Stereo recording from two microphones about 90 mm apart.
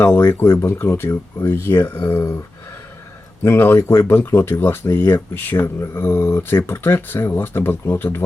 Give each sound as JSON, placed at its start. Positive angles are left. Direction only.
{"t": 0.0, "sound": "speech", "side_deg": 25}
{"t": 3.4, "sound": "speech", "side_deg": 25}